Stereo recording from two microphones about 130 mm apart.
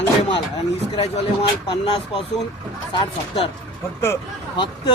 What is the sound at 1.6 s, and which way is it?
Speech, 45° left (ahead or behind).